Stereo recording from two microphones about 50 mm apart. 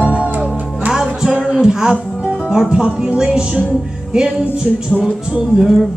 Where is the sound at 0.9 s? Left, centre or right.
Centre.